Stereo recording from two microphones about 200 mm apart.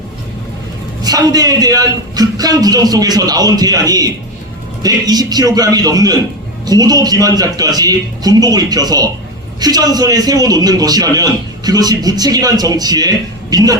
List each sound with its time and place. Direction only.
1.0 s a man's voice: 20° right (ahead or behind)